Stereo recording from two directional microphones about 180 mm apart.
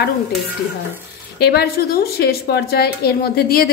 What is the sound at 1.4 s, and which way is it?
A woman's voice, 65° left (ahead or behind).